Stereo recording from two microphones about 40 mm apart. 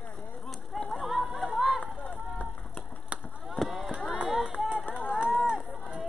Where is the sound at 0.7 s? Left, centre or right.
Centre.